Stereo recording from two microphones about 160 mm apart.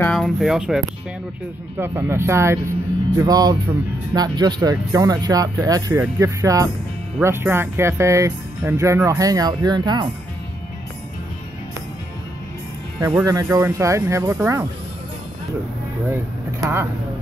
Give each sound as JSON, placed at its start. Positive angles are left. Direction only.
{"t": 0.0, "sound": "speech", "side_deg": 5}
{"t": 1.8, "sound": "speech", "side_deg": -15}
{"t": 13.0, "sound": "speech", "side_deg": -20}